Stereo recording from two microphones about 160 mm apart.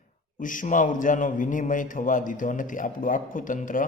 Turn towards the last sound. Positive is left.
turn(degrees=55)  # may be behind; listen again after turning